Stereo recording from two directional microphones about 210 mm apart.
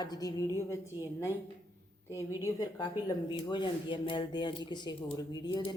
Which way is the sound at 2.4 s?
20° left (ahead or behind).